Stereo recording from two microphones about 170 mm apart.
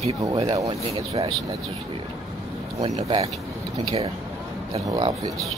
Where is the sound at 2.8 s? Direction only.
35° right (ahead or behind).